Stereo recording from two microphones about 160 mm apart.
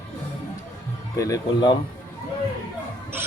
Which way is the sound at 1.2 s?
20° left (ahead or behind).